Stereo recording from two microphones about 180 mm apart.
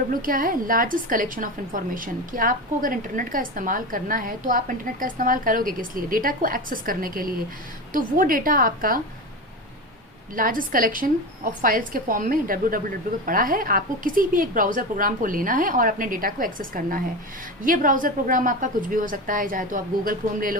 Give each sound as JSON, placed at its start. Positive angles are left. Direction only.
{"t": 0.1, "sound": "a woman's voice", "side_deg": -50}
{"t": 10.3, "sound": "a woman's voice", "side_deg": -50}